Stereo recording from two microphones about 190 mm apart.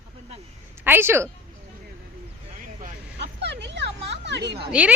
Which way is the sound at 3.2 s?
65° right (ahead or behind).